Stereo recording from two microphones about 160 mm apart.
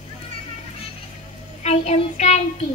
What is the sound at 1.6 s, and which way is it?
Child singing, 40° left (ahead or behind).